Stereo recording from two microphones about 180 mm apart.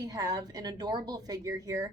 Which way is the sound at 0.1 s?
20° right (ahead or behind).